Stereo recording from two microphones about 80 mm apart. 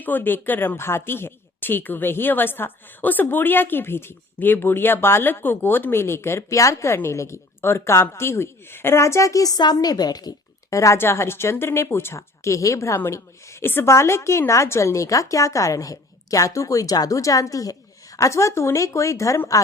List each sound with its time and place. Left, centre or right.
0.0 s a woman's voice: left
10.7 s a woman's voice: left